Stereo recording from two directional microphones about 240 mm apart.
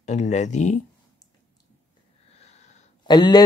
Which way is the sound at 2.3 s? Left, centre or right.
Left.